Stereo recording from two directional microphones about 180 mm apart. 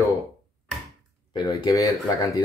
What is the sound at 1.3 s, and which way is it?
Speech, 20° left (ahead or behind).